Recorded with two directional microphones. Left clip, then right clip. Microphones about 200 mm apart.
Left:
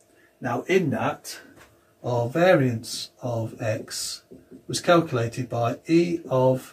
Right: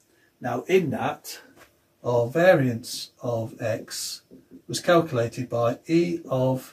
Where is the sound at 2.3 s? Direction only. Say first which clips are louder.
Even; 10° left (ahead or behind).